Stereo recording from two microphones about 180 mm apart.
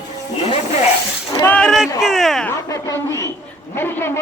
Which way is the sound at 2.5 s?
20° left (ahead or behind).